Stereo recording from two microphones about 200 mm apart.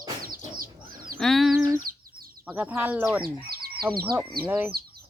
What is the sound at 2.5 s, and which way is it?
Speech, 5° right (ahead or behind).